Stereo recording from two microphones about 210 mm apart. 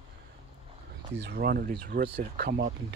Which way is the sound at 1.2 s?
45° right (ahead or behind).